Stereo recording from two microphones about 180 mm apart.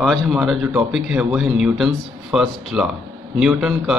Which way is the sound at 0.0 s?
Centre (ahead or behind).